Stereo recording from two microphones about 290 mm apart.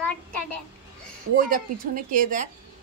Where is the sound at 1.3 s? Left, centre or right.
Right.